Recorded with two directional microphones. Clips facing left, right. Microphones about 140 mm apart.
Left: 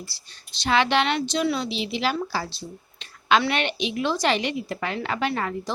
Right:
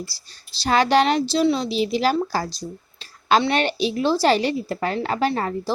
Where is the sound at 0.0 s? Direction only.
35° right (ahead or behind).